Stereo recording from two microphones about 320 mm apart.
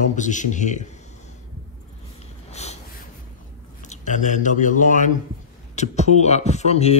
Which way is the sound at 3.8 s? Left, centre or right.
Left.